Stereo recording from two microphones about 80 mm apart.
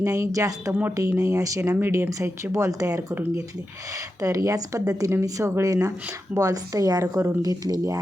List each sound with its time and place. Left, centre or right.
0.0 s speech: right
0.7 s speech: right
1.2 s speech: right
4.2 s speech: right